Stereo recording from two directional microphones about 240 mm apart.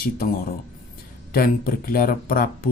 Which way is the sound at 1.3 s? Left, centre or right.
Left.